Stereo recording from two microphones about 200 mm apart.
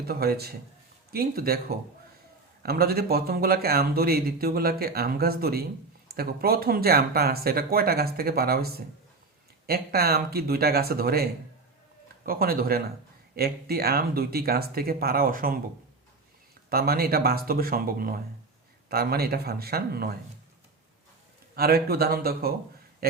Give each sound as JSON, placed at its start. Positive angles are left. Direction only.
{"t": 0.1, "sound": "speech", "side_deg": -50}
{"t": 16.6, "sound": "speech", "side_deg": -50}
{"t": 21.5, "sound": "speech", "side_deg": -50}